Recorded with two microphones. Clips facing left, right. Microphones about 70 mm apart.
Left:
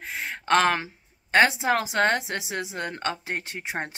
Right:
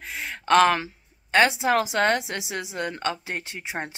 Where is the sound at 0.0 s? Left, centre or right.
Left.